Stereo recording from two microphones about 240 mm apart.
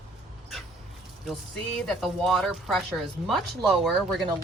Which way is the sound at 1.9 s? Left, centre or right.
Centre.